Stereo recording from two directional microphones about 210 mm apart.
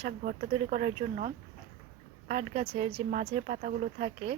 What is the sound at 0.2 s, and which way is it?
Speech, 45° right (ahead or behind).